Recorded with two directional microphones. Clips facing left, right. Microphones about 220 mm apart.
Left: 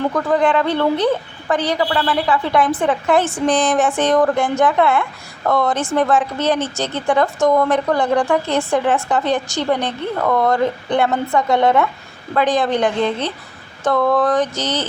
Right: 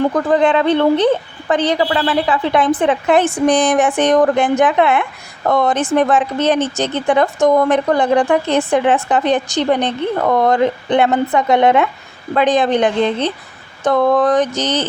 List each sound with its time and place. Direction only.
0.3 s speech: 20° right (ahead or behind)